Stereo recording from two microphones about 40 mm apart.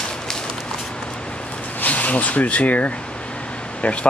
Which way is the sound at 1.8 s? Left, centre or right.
Left.